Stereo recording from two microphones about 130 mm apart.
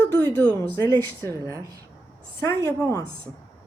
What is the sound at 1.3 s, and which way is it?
Speech, 25° right (ahead or behind).